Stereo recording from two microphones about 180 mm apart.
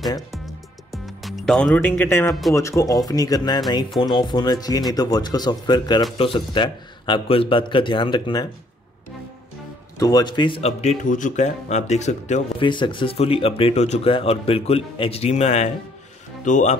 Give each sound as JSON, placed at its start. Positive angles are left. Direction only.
{"t": 0.3, "sound": "music", "side_deg": 0}
{"t": 2.5, "sound": "a man's voice", "side_deg": 15}
{"t": 9.9, "sound": "speech", "side_deg": 20}
{"t": 12.6, "sound": "speech", "side_deg": 25}